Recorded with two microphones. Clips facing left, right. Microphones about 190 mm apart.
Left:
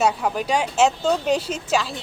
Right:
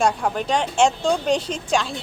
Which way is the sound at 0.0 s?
5° left (ahead or behind).